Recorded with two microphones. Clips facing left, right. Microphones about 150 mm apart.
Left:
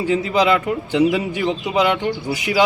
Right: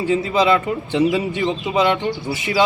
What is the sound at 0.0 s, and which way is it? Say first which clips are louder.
A man's voice: even; centre (ahead or behind).